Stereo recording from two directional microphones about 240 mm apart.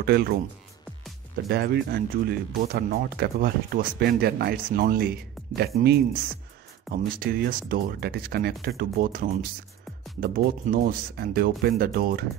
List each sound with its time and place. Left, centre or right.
0.0 s speech: right
1.5 s speech: right